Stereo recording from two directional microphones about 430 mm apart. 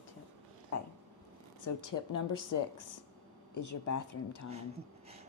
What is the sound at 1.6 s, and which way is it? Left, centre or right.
A woman's voice, left.